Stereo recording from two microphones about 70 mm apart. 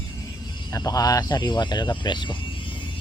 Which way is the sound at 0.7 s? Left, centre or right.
Left.